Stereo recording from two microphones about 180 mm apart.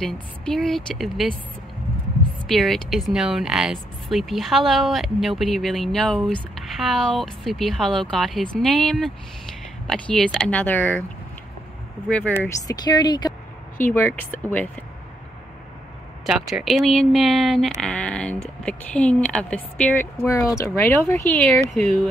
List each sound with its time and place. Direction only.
0.0 s speech: centre (ahead or behind)
2.4 s speech: centre (ahead or behind)
12.1 s speech: 5° left (ahead or behind)
12.4 s speech: 20° left (ahead or behind)
13.7 s speech: 10° left (ahead or behind)
16.3 s speech: centre (ahead or behind)